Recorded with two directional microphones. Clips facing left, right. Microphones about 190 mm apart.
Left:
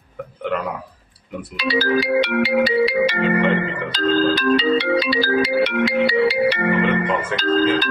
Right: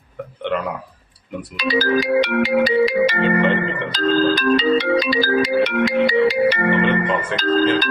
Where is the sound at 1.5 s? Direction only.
45° right (ahead or behind).